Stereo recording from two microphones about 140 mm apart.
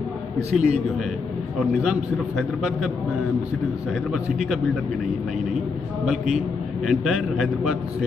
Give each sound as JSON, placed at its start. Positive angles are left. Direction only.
{"t": 0.5, "sound": "a man's voice", "side_deg": -55}
{"t": 1.9, "sound": "a man's voice", "side_deg": 0}
{"t": 4.1, "sound": "a man's voice", "side_deg": 0}
{"t": 6.9, "sound": "a man's voice", "side_deg": 0}